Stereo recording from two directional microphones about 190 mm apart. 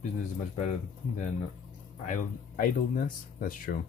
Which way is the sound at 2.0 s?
40° left (ahead or behind).